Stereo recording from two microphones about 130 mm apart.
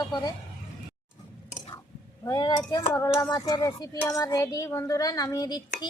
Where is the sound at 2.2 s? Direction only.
30° left (ahead or behind).